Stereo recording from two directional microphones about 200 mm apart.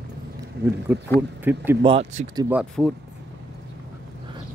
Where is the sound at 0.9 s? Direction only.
10° right (ahead or behind).